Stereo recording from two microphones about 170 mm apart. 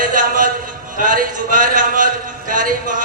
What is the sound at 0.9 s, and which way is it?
A man's voice, 55° right (ahead or behind).